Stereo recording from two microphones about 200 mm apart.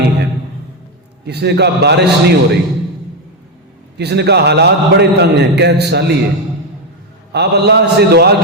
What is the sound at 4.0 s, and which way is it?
A man's voice, 55° right (ahead or behind).